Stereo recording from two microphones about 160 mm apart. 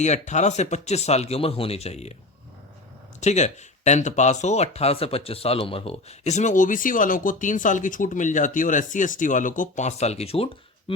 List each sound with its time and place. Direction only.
0.0 s speech: 45° left (ahead or behind)
3.2 s speech: 45° left (ahead or behind)